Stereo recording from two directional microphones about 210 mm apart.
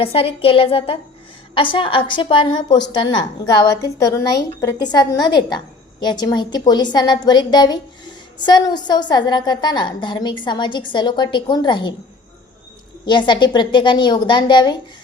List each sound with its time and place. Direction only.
0.0 s a woman's voice: 25° left (ahead or behind)
13.1 s a woman's voice: 20° left (ahead or behind)